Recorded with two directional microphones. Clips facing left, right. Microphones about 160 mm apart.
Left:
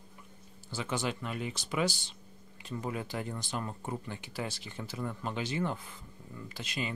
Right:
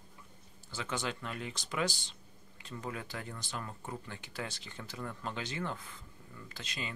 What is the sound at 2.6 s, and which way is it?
Speech, 20° left (ahead or behind).